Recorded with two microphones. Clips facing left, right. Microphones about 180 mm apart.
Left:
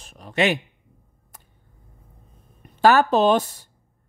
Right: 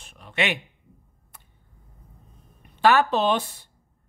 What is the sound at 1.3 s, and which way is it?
Vehicle, 40° left (ahead or behind).